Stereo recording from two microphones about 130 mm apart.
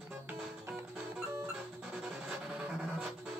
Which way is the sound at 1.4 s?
5° right (ahead or behind).